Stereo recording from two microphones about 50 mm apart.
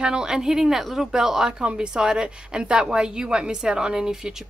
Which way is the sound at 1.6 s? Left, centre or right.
Right.